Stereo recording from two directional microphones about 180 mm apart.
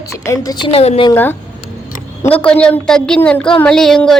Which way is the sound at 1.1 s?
10° left (ahead or behind).